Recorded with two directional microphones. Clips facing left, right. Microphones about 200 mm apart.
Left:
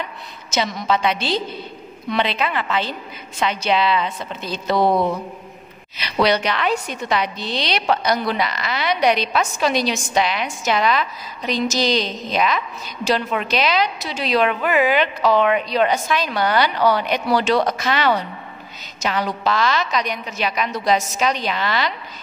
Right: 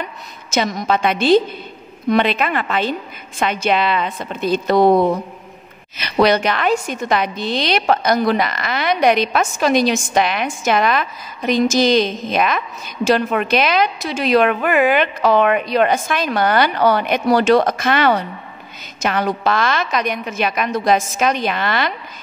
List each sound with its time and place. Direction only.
0.6 s a woman's voice: 50° right (ahead or behind)